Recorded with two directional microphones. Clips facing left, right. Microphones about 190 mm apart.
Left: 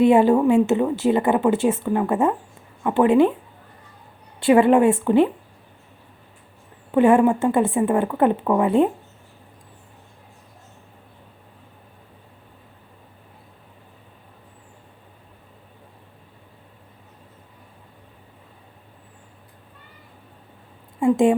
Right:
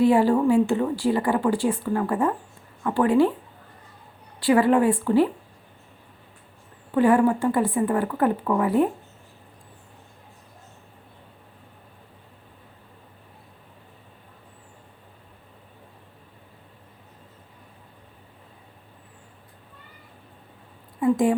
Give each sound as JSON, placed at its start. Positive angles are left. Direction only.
{"t": 0.0, "sound": "a woman's voice", "side_deg": 20}
{"t": 4.4, "sound": "a woman's voice", "side_deg": 25}
{"t": 6.9, "sound": "a woman's voice", "side_deg": 25}
{"t": 21.0, "sound": "a sound", "side_deg": 25}